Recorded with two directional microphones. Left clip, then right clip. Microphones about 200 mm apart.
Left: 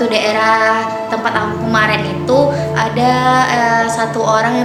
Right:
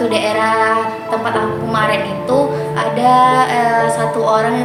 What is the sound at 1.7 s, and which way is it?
Music, 25° left (ahead or behind).